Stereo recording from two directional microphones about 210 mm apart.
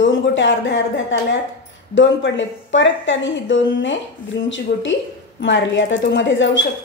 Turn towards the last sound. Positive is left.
turn(degrees=60)  # may be behind; listen again after turning